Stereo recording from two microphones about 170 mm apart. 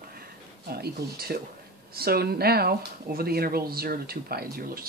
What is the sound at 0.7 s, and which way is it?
Speech, 70° right (ahead or behind).